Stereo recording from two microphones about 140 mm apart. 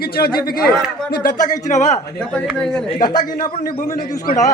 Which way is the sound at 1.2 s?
60° left (ahead or behind).